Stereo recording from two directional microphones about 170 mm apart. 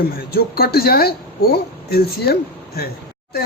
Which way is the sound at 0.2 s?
65° left (ahead or behind).